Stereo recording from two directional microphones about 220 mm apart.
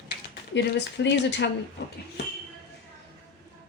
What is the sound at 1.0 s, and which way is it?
Speech, 50° left (ahead or behind).